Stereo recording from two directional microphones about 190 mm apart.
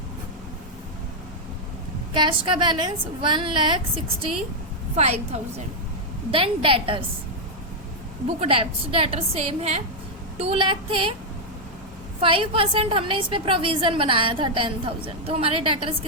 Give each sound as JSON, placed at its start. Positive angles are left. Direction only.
{"t": 2.1, "sound": "a woman's voice", "side_deg": -25}
{"t": 8.4, "sound": "a woman's voice", "side_deg": -30}
{"t": 12.2, "sound": "a woman's voice", "side_deg": -30}